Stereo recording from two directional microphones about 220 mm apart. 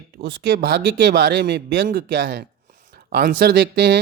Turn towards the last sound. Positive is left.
turn(degrees=-50)  # may be behind; listen again after turning